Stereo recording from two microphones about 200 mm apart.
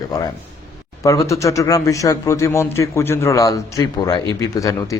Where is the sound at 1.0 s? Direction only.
15° left (ahead or behind).